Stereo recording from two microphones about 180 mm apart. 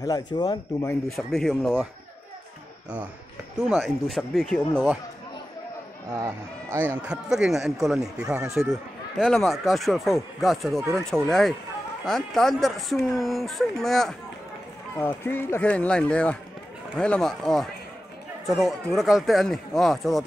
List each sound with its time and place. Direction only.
0.0 s speech: 20° left (ahead or behind)
1.0 s speech: centre (ahead or behind)
3.6 s speech: centre (ahead or behind)
6.2 s speech: 15° right (ahead or behind)
15.0 s speech: 10° left (ahead or behind)